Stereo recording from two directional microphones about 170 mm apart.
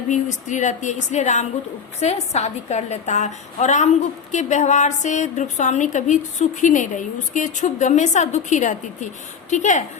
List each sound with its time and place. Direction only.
0.1 s a woman's voice: 45° left (ahead or behind)